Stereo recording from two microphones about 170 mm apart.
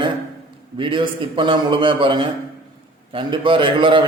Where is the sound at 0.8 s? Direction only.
30° right (ahead or behind).